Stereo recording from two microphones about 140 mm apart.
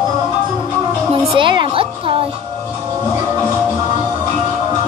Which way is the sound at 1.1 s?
35° right (ahead or behind).